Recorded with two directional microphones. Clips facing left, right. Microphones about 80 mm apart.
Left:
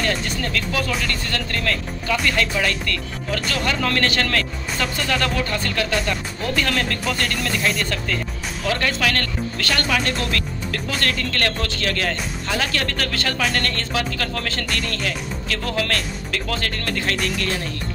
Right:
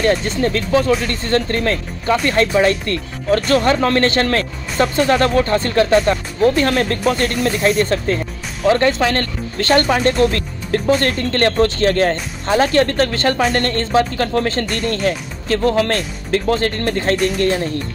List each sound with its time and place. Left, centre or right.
0.0 s speech: right